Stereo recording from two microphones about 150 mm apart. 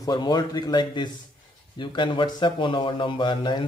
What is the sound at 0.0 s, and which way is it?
A man's voice, 30° left (ahead or behind).